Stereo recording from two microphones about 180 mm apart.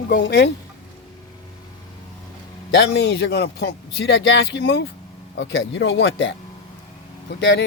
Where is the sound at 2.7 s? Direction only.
75° left (ahead or behind).